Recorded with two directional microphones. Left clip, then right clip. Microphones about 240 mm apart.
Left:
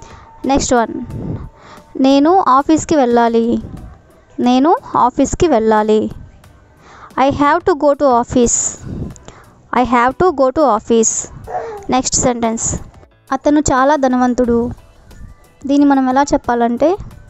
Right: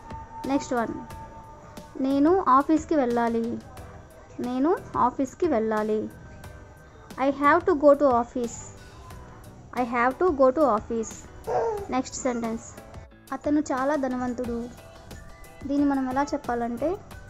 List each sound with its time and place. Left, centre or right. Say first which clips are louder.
0.5 s a woman's voice: left 13 dB; left
2.0 s a woman's voice: left 12 dB; left
4.5 s a woman's voice: left 13 dB; left
7.2 s a woman's voice: left 9 dB; left
15.7 s speech: left 13 dB; left